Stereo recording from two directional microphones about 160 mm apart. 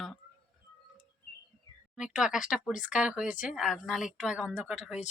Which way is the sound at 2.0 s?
5° right (ahead or behind).